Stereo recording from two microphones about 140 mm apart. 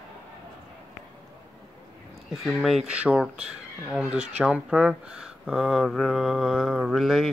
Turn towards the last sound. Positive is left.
turn(degrees=0)  # may be behind; listen again after turning